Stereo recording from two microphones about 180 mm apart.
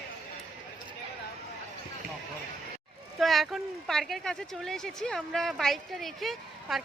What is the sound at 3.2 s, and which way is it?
Speech, centre (ahead or behind).